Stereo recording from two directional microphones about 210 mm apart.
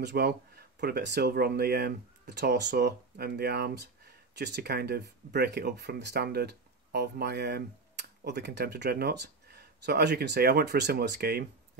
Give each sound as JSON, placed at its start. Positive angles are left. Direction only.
{"t": 0.0, "sound": "speech", "side_deg": -50}